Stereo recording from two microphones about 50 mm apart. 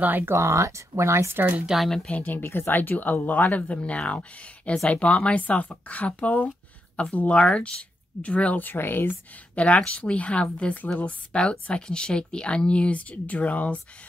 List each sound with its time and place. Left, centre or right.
0.2 s speech: right
1.7 s speech: centre
2.2 s speech: left
3.4 s speech: left
8.5 s speech: left
9.6 s speech: left